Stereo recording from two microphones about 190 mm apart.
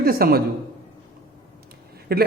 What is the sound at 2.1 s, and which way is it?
Speech, 55° right (ahead or behind).